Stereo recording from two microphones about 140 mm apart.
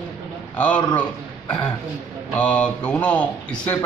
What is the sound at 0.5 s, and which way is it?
Speech, 10° left (ahead or behind).